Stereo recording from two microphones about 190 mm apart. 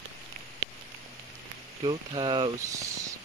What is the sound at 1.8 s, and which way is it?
Speech, 25° right (ahead or behind).